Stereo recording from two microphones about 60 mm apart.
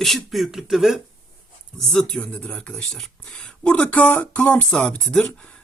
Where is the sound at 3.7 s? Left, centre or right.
Left.